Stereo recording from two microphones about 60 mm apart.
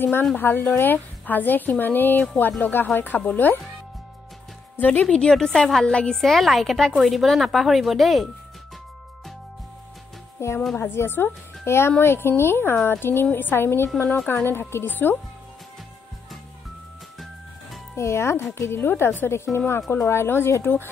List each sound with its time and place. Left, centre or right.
0.4 s a woman's voice: left
4.7 s speech: left
5.0 s a woman's voice: centre
10.4 s a woman's voice: left
14.3 s a woman's voice: left
17.9 s a woman's voice: left